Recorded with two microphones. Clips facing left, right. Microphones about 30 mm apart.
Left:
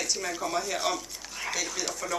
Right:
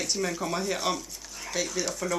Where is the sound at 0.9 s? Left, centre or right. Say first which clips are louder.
Even; centre.